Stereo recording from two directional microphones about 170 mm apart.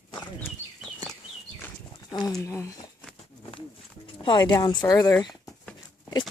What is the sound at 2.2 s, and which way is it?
Speech, 20° left (ahead or behind).